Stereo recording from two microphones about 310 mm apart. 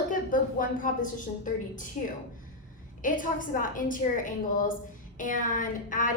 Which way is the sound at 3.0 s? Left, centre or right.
Left.